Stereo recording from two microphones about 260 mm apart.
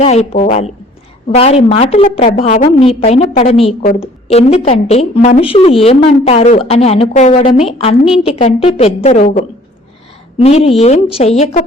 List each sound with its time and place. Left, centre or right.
0.0 s a woman's voice: left